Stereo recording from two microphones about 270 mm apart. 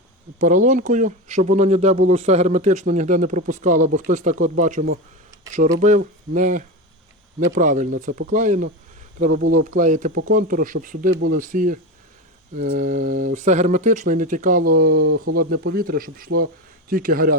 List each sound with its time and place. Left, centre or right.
0.3 s speech: right